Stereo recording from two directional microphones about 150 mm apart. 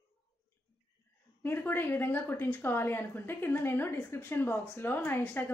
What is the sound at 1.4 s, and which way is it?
Speech, 15° left (ahead or behind).